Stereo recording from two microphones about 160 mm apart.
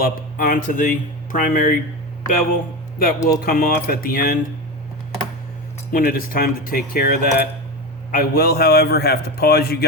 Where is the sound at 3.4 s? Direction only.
65° left (ahead or behind).